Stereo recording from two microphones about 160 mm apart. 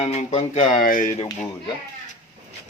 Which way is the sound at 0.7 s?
60° left (ahead or behind).